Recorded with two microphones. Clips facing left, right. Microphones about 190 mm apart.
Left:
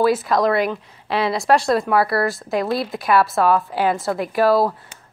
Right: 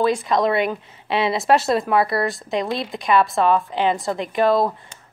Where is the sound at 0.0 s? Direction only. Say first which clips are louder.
Left 2 dB; 5° left (ahead or behind).